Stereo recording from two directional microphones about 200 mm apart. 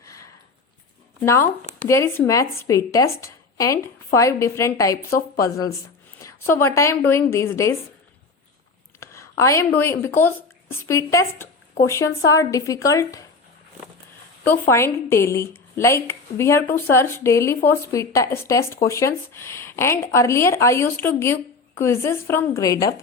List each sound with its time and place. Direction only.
0.0 s a sound: 15° left (ahead or behind)
1.2 s speech: 15° left (ahead or behind)
9.0 s speech: 15° left (ahead or behind)
14.7 s speech: 15° left (ahead or behind)